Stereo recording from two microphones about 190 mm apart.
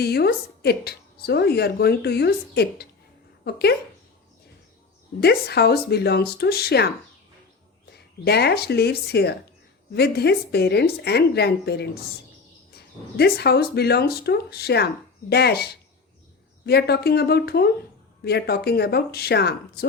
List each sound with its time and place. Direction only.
0.0 s a woman's voice: 60° left (ahead or behind)
5.2 s a woman's voice: 60° left (ahead or behind)